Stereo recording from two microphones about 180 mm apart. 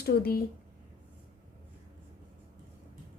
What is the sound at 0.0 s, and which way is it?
Speech, 60° left (ahead or behind).